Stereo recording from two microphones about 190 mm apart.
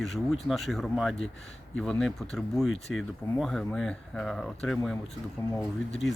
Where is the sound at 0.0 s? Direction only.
Centre (ahead or behind).